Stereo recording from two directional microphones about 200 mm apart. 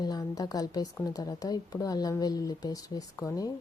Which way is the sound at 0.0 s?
20° left (ahead or behind).